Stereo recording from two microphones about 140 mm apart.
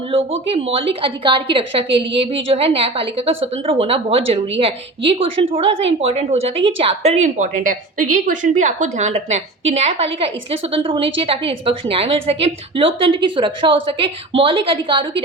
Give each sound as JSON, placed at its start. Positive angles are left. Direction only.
{"t": 0.1, "sound": "a woman's voice", "side_deg": -45}